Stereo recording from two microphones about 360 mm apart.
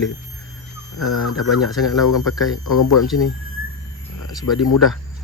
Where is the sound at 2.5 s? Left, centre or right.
Left.